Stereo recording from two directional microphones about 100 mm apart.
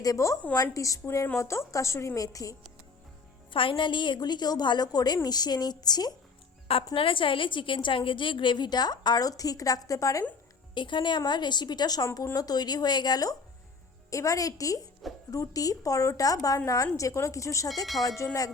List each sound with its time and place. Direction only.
0.0 s a woman's voice: 35° left (ahead or behind)
3.5 s a woman's voice: 60° left (ahead or behind); by 6.1 s 40° left (ahead or behind)
6.9 s a woman's voice: 60° left (ahead or behind); by 10.2 s 35° left (ahead or behind)
10.8 s a woman's voice: 55° left (ahead or behind); by 17.7 s 30° left (ahead or behind)
18.2 s music: 30° left (ahead or behind)